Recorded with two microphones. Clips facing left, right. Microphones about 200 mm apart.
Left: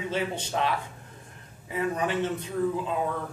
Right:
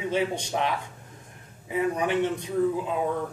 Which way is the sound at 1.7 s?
15° right (ahead or behind).